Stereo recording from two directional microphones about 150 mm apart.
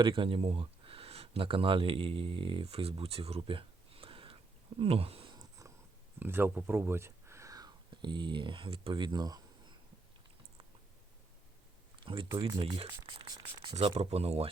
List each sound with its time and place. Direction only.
0.0 s speech: 35° right (ahead or behind)
5.4 s a sound: 20° right (ahead or behind)
6.1 s speech: 15° right (ahead or behind)
12.0 s speech: 35° right (ahead or behind)
12.4 s a sound: 35° right (ahead or behind)
13.7 s speech: 40° right (ahead or behind)